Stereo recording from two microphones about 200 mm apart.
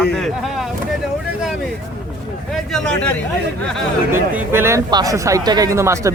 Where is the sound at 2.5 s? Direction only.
Centre (ahead or behind).